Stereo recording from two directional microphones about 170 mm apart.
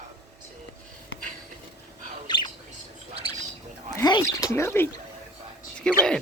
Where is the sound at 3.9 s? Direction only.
20° left (ahead or behind).